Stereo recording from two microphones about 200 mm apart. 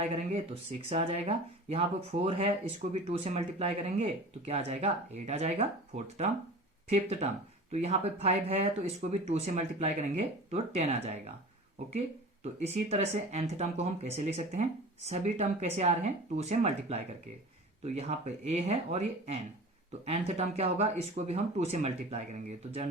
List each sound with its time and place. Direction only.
0.0 s speech: 30° right (ahead or behind)
6.9 s speech: 35° right (ahead or behind)